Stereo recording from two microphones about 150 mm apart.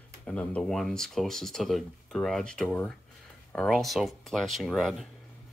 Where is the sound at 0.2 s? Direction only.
10° left (ahead or behind).